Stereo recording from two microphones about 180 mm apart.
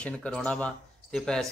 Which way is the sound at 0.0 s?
5° left (ahead or behind).